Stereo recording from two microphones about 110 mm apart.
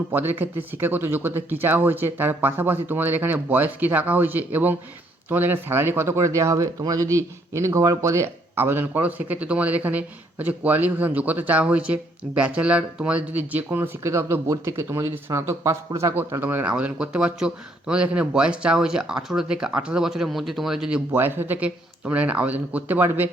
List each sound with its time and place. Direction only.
0.1 s speech: 15° right (ahead or behind)
16.1 s speech: 20° right (ahead or behind)
21.1 s speech: 20° right (ahead or behind)